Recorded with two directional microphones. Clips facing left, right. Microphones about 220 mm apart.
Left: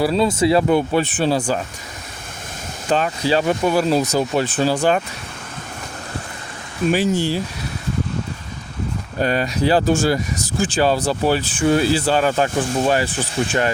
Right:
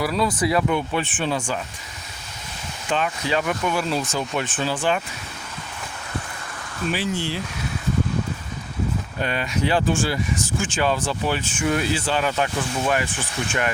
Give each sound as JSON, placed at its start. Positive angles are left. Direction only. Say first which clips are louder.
{"t": 0.0, "sound": "speech", "louder": "left 5 dB", "side_deg": 25}
{"t": 2.9, "sound": "speech", "louder": "left 5 dB", "side_deg": 35}
{"t": 6.9, "sound": "speech", "louder": "left 7 dB", "side_deg": 45}
{"t": 9.1, "sound": "speech", "louder": "left 8 dB", "side_deg": 40}